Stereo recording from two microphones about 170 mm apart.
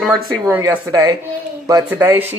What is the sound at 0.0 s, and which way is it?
Speech, centre (ahead or behind).